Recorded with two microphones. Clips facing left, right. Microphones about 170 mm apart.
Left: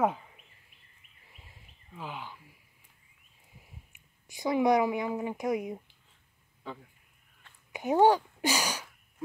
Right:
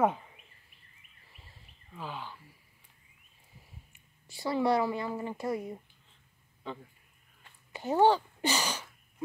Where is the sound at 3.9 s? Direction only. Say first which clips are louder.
Left 1 dB; 15° left (ahead or behind).